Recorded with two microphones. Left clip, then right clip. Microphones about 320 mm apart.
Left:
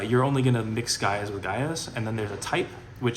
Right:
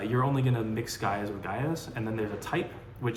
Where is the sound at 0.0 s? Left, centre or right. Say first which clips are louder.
Left 5 dB; left.